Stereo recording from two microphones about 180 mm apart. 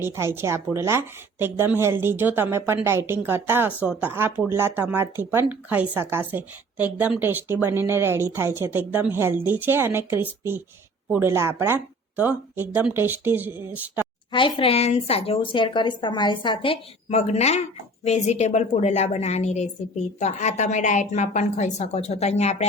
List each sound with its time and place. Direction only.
0.0 s a woman's voice: 15° right (ahead or behind)
14.3 s a woman's voice: 25° left (ahead or behind)